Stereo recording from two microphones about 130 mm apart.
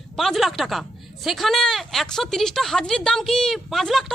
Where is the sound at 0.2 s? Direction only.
Centre (ahead or behind).